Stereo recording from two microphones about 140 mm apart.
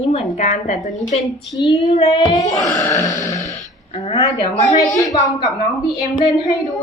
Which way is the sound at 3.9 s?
50° left (ahead or behind).